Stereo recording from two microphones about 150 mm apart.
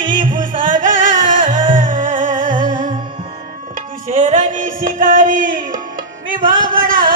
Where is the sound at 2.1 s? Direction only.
60° right (ahead or behind).